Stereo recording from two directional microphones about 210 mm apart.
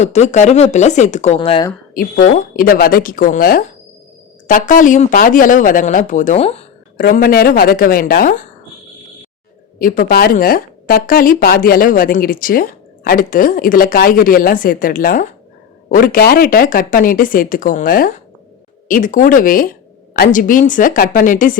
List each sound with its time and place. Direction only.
0.0 s a woman's voice: 30° left (ahead or behind)
2.0 s a woman's voice: 40° left (ahead or behind)
6.9 s speech: 45° left (ahead or behind)
9.7 s a woman's voice: 40° left (ahead or behind)